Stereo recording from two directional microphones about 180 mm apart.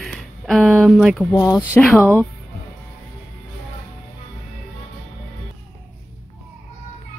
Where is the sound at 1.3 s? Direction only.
15° left (ahead or behind).